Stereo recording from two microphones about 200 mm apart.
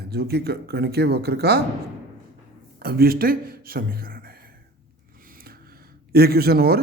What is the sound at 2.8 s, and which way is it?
Speech, 50° right (ahead or behind).